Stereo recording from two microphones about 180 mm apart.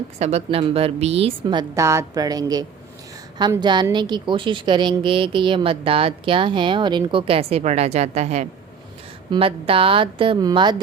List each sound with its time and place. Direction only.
0.2 s a woman's voice: 35° right (ahead or behind)